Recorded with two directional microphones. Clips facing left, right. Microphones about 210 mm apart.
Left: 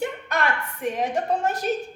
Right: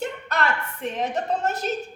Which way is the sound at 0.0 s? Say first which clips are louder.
Left 1 dB; 15° left (ahead or behind).